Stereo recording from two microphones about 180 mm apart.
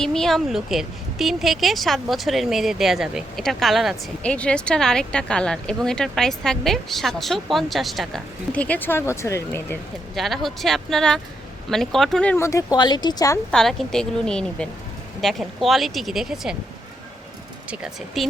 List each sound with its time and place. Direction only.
0.0 s a woman's voice: centre (ahead or behind)
10.2 s a woman's voice: centre (ahead or behind); by 13.4 s 20° left (ahead or behind)
13.5 s a woman's voice: centre (ahead or behind)
17.7 s a woman's voice: centre (ahead or behind)